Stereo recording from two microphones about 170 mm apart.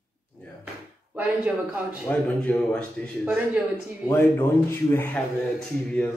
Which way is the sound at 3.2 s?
10° right (ahead or behind).